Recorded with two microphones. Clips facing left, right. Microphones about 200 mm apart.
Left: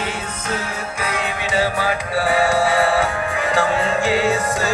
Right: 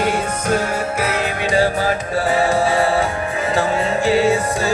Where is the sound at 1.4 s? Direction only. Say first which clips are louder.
Right 4 dB; 45° right (ahead or behind).